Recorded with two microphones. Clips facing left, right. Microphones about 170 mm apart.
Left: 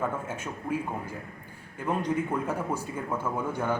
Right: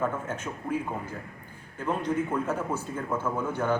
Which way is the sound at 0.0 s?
10° left (ahead or behind).